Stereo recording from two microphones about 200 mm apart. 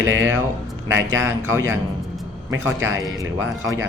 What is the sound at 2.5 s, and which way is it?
Speech, 75° right (ahead or behind).